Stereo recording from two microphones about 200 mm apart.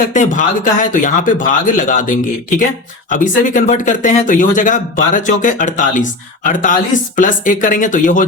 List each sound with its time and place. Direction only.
0.0 s speech: 40° left (ahead or behind)